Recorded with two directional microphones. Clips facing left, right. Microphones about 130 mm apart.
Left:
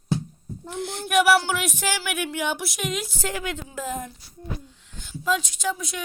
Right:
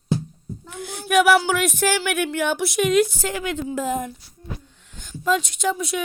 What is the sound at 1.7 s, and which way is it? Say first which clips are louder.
Speech: right 6 dB; 10° left (ahead or behind).